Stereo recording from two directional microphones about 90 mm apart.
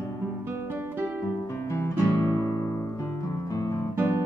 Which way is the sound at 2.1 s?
40° left (ahead or behind).